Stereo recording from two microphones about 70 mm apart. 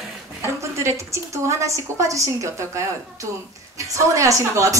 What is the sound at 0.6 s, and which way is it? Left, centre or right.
A man's voice, right.